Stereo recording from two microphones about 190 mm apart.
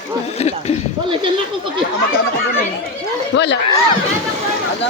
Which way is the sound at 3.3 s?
70° left (ahead or behind).